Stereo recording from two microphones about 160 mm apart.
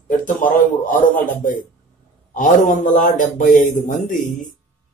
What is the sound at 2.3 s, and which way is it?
A man's voice, 50° left (ahead or behind).